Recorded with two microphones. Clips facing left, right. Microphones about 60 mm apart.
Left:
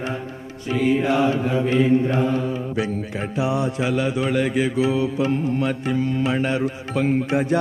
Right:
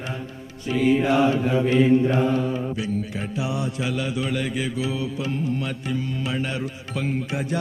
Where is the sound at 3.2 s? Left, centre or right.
Left.